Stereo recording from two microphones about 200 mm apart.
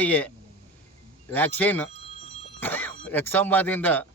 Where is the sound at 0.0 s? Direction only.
10° left (ahead or behind).